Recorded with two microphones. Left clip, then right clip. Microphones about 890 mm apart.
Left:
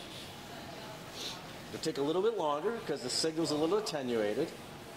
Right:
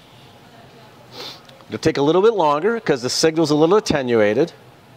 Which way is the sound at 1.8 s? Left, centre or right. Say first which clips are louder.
Right 16 dB; right.